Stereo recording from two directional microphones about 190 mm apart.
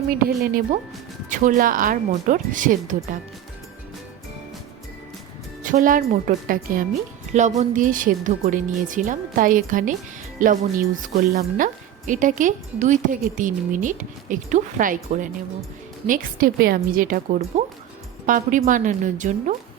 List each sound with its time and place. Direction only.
0.1 s a woman's voice: 50° right (ahead or behind)
5.6 s a woman's voice: 45° right (ahead or behind)